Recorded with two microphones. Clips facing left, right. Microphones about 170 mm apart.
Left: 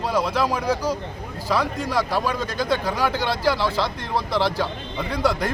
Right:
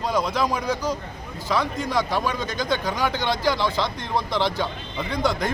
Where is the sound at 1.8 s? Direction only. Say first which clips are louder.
Left 1 dB; 10° left (ahead or behind).